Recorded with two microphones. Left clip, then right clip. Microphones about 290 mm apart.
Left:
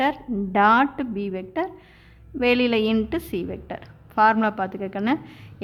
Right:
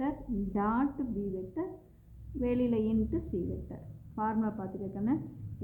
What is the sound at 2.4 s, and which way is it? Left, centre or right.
A woman's voice, left.